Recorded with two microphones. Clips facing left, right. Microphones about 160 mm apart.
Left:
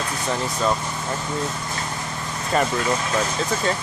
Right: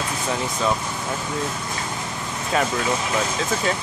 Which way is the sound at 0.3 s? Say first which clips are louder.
Left 1 dB; 5° right (ahead or behind).